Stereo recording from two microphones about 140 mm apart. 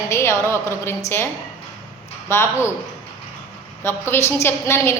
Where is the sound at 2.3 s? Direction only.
20° left (ahead or behind).